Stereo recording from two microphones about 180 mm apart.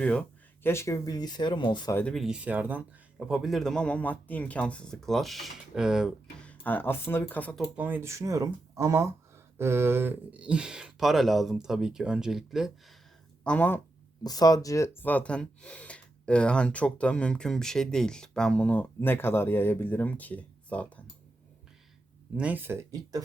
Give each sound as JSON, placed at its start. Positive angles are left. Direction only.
{"t": 0.0, "sound": "speech", "side_deg": 5}
{"t": 2.0, "sound": "speech", "side_deg": 5}
{"t": 6.5, "sound": "speech", "side_deg": 10}
{"t": 7.8, "sound": "speech", "side_deg": -10}
{"t": 13.4, "sound": "speech", "side_deg": 10}
{"t": 14.3, "sound": "speech", "side_deg": 20}
{"t": 22.4, "sound": "speech", "side_deg": -10}